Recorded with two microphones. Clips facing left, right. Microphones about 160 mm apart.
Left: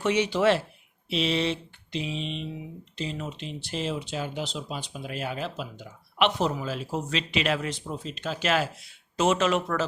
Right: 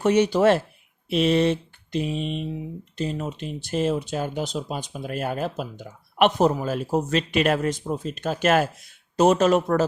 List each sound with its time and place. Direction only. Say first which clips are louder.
0.0 s speech: right 5 dB; 45° right (ahead or behind)